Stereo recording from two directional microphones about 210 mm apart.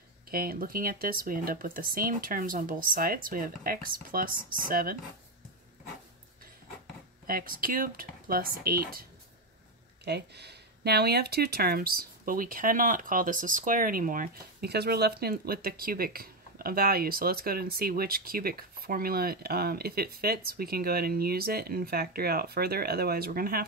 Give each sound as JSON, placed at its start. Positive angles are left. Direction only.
{"t": 0.3, "sound": "speech", "side_deg": -45}
{"t": 7.2, "sound": "speech", "side_deg": -45}
{"t": 10.0, "sound": "speech", "side_deg": -50}